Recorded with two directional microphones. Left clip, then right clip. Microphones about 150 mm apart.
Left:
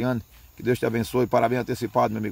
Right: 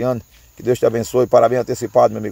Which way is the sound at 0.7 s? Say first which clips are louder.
Right 8 dB; centre (ahead or behind).